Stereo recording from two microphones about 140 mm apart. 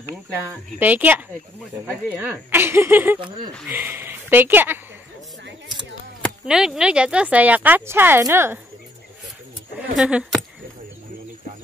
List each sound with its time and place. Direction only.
0.7 s speech: 10° right (ahead or behind)
3.2 s speech: 35° right (ahead or behind)
3.6 s speech: 15° right (ahead or behind)
6.4 s speech: 5° right (ahead or behind)
9.9 s speech: 5° right (ahead or behind)